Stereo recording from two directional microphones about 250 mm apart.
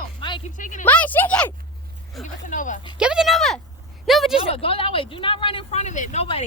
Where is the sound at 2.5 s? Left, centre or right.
Left.